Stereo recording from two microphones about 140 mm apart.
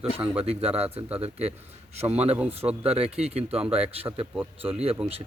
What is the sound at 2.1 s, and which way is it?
Speech, 50° right (ahead or behind).